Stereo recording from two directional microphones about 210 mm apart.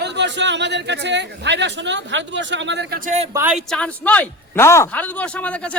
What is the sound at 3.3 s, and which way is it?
A man's voice, 10° right (ahead or behind).